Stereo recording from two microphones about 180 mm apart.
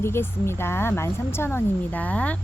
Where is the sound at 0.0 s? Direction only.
15° left (ahead or behind).